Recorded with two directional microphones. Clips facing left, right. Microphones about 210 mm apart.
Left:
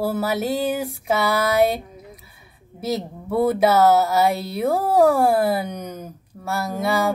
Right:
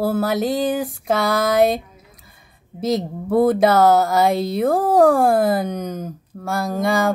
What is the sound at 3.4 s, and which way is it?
A woman's voice, 5° left (ahead or behind).